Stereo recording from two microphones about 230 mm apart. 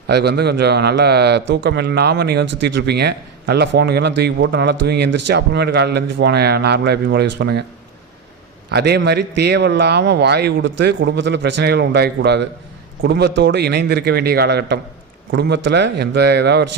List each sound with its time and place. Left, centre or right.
0.1 s a man's voice: right
8.7 s a man's voice: right